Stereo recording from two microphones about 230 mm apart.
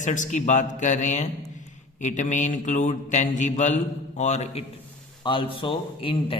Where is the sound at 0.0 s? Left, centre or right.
Left.